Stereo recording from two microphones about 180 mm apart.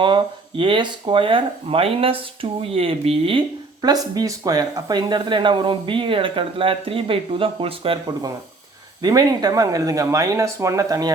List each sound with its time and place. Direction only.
0.0 s speech: 25° right (ahead or behind)